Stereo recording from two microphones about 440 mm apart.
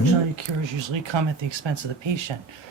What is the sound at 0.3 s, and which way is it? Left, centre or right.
Speech, right.